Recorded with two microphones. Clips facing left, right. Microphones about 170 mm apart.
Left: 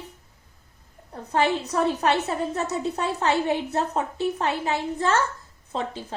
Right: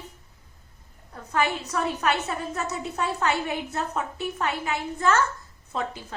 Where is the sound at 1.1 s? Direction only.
30° left (ahead or behind).